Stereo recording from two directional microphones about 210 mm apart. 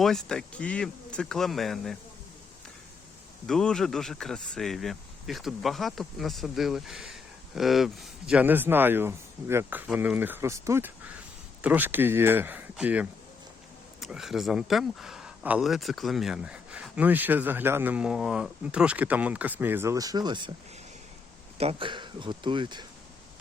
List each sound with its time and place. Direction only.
0.0 s speech: centre (ahead or behind)
3.4 s speech: 5° left (ahead or behind); by 20.5 s 20° right (ahead or behind)
21.6 s speech: 25° right (ahead or behind)